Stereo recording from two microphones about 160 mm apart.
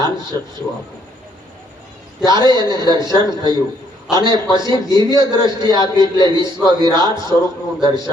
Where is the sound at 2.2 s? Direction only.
25° right (ahead or behind).